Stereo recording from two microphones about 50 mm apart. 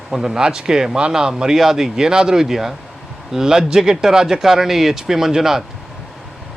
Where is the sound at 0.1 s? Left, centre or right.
Centre.